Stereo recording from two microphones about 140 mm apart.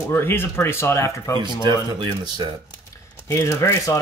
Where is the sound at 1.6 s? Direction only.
35° right (ahead or behind).